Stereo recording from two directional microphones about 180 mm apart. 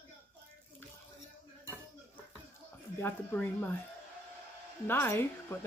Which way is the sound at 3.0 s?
10° left (ahead or behind).